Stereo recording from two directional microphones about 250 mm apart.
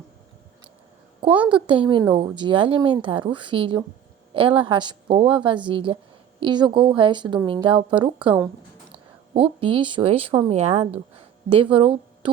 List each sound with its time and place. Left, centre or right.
1.6 s speech: centre